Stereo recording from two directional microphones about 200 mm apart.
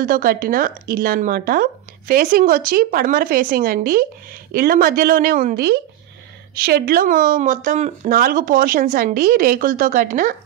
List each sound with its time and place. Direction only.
0.0 s speech: 45° right (ahead or behind)